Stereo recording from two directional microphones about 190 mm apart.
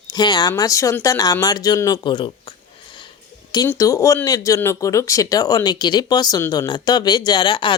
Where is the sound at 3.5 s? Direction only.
20° left (ahead or behind).